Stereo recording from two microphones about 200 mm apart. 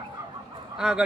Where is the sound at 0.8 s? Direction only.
5° right (ahead or behind).